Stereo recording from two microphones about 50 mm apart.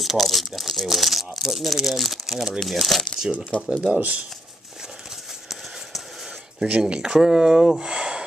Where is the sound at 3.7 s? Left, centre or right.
Right.